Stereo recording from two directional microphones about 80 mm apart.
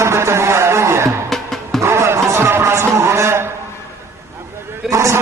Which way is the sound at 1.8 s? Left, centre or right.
Right.